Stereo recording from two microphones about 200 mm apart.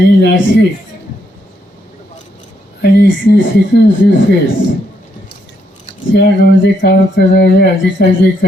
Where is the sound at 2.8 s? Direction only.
55° left (ahead or behind).